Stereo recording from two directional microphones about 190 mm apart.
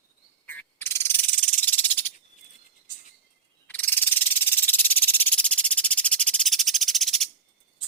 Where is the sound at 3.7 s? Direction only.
10° left (ahead or behind).